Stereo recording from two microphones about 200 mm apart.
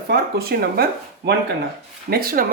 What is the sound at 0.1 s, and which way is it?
Speech, 50° right (ahead or behind).